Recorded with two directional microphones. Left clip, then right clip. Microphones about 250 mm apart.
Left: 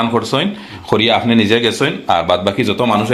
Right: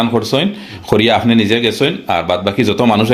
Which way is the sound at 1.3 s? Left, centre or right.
Centre.